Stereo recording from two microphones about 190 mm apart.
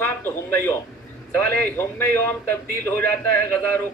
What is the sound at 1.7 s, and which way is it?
A man's voice, 10° left (ahead or behind).